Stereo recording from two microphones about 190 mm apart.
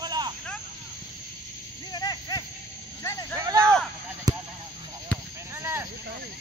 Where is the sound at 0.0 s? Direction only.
20° right (ahead or behind).